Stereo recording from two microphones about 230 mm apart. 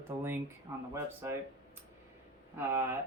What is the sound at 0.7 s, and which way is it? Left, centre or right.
Speech, centre.